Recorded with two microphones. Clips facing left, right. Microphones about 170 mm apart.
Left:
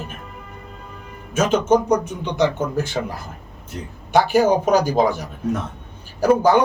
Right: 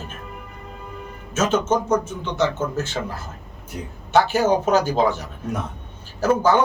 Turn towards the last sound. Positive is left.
turn(degrees=15)  # may be behind; listen again after turning